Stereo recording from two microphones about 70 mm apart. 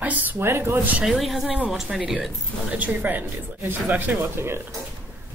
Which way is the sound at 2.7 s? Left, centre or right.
Right.